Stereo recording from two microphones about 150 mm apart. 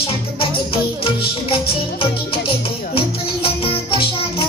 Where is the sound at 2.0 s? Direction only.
35° left (ahead or behind).